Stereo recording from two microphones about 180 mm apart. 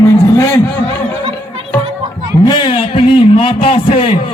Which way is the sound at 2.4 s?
25° left (ahead or behind).